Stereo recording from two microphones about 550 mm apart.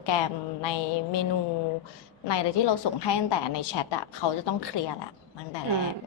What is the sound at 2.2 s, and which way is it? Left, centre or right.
A woman's voice, left.